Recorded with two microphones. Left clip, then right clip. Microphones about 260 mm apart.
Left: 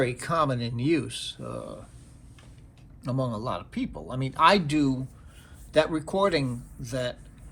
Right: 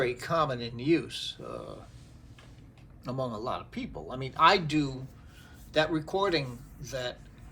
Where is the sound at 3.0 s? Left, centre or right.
Left.